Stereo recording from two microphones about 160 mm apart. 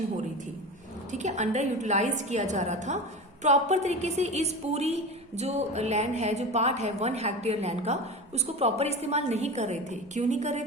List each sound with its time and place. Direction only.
1.1 s a woman's voice: 45° right (ahead or behind)